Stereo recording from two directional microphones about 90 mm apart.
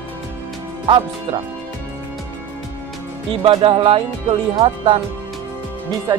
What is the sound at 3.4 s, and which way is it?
Speech, 90° right.